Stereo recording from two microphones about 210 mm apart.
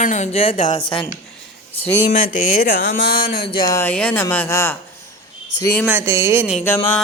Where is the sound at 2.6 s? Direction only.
50° left (ahead or behind).